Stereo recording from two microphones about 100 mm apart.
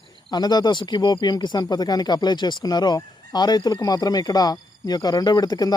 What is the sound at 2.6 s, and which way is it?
Speech, 45° left (ahead or behind).